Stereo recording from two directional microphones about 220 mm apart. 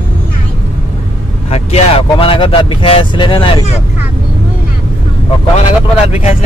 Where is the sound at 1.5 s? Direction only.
25° left (ahead or behind).